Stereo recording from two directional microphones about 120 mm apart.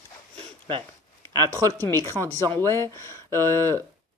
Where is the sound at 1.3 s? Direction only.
30° right (ahead or behind).